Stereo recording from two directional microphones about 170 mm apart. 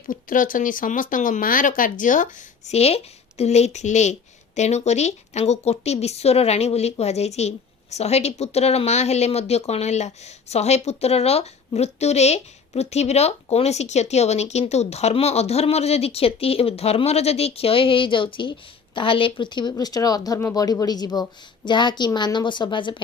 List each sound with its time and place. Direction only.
0.1 s speech: 50° left (ahead or behind); by 23.0 s 25° left (ahead or behind)